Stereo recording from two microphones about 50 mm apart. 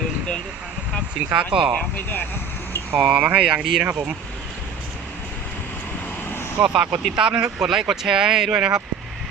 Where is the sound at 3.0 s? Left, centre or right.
Centre.